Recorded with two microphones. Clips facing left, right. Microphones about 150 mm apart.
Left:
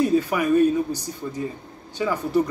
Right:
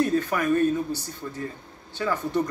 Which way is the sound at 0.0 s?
10° left (ahead or behind).